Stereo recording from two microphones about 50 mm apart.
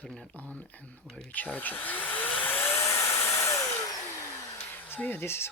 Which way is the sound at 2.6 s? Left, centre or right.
Left.